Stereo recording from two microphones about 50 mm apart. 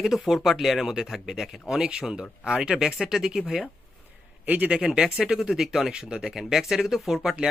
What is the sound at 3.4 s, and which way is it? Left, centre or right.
Speech, centre.